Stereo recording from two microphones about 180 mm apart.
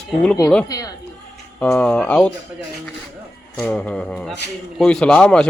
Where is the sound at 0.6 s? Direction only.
20° left (ahead or behind).